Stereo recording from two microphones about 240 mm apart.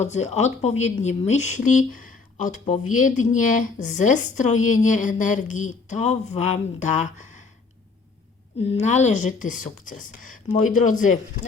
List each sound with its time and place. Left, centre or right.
0.0 s speech: left
8.6 s speech: left